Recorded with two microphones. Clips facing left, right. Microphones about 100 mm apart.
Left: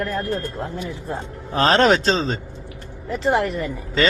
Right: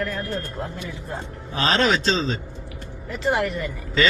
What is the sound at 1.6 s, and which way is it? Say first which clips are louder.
Speech: left 4 dB; 50° left (ahead or behind).